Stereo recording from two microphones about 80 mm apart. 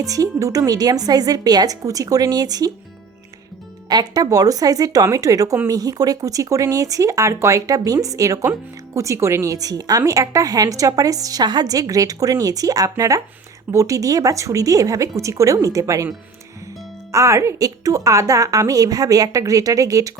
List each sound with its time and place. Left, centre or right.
0.0 s a woman's voice: right
3.8 s a woman's voice: right
17.1 s a woman's voice: right